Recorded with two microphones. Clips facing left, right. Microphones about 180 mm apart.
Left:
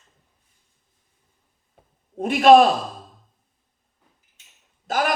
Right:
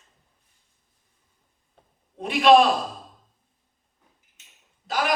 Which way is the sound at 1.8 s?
5° left (ahead or behind).